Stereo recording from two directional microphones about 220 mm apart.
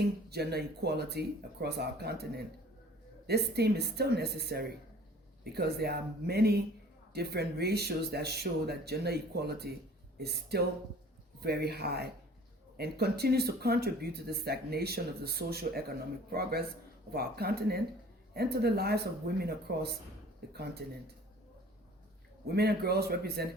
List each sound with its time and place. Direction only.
0.3 s speech: 45° right (ahead or behind)
22.4 s speech: 45° right (ahead or behind)